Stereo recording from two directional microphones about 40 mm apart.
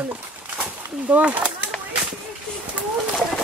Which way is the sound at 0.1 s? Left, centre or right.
Right.